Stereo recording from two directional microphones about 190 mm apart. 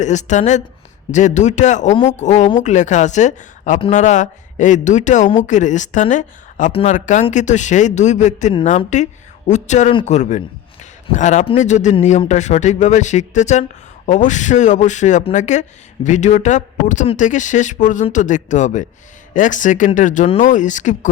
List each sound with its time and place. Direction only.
0.0 s speech: 40° left (ahead or behind)